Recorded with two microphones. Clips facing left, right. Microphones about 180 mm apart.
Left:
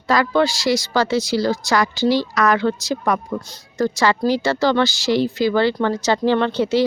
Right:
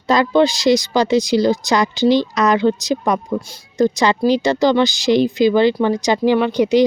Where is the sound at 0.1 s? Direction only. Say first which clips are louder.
Right 3 dB; 20° right (ahead or behind).